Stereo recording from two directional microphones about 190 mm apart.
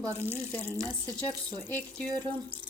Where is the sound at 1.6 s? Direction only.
10° left (ahead or behind).